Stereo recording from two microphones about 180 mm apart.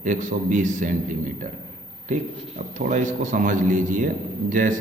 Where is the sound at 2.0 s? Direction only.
45° right (ahead or behind).